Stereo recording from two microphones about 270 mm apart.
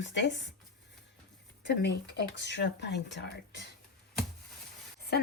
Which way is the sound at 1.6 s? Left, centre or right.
Left.